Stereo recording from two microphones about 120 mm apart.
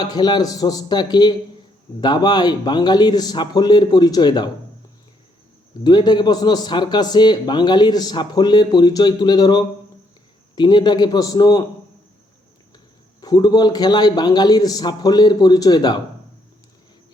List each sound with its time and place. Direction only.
0.0 s a man's voice: 35° left (ahead or behind)
5.8 s a man's voice: 35° left (ahead or behind)
13.2 s a man's voice: 35° left (ahead or behind)